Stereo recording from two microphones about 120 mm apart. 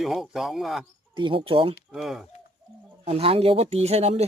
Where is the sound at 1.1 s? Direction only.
45° right (ahead or behind).